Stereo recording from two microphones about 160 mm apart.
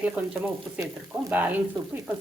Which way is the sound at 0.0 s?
10° right (ahead or behind).